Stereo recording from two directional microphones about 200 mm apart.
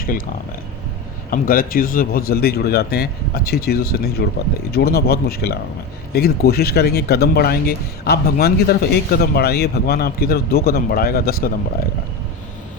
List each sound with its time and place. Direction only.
1.3 s speech: 45° left (ahead or behind)